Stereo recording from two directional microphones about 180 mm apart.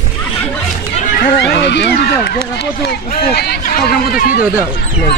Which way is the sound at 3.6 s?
50° left (ahead or behind).